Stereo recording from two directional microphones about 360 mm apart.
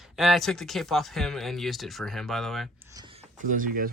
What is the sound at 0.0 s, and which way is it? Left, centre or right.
Speech, centre.